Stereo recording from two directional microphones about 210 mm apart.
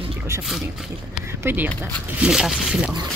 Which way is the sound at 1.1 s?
10° right (ahead or behind).